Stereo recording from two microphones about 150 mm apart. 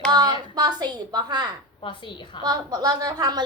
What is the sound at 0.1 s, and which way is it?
A woman's voice, 25° right (ahead or behind).